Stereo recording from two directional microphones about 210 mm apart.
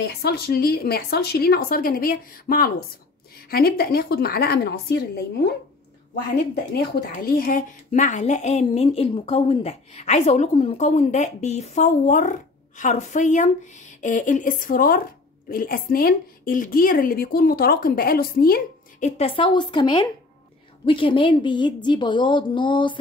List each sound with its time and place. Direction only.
0.0 s a woman's voice: 50° left (ahead or behind)
6.7 s a woman's voice: 45° left (ahead or behind); by 22.9 s 20° left (ahead or behind)